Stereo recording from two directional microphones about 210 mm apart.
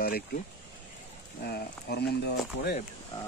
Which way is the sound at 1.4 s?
50° left (ahead or behind).